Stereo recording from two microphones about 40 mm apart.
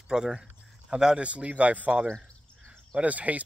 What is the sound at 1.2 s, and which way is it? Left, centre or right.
Speech, right.